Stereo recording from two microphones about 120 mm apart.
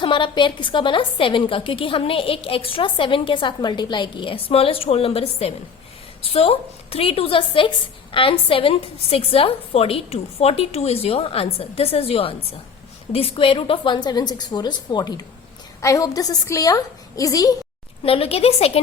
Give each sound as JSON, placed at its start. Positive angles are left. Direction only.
{"t": 0.0, "sound": "a woman's voice", "side_deg": 45}
{"t": 18.0, "sound": "a woman's voice", "side_deg": 50}